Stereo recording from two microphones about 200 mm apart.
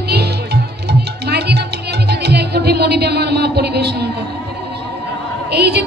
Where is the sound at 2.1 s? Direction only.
55° right (ahead or behind).